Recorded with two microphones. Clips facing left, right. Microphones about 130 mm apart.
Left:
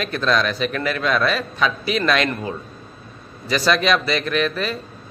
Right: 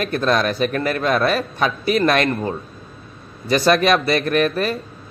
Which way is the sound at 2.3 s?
30° right (ahead or behind).